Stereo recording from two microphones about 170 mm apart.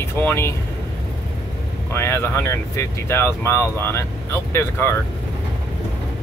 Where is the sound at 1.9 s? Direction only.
15° left (ahead or behind).